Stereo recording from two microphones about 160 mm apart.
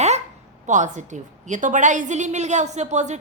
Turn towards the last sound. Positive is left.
turn(degrees=-45)  # may be behind; listen again after turning